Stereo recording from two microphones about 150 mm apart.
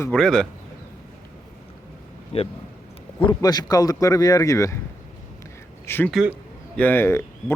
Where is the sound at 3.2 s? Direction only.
30° left (ahead or behind).